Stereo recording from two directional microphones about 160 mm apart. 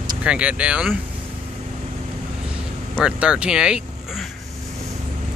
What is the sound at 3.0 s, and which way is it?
Speech, 5° right (ahead or behind).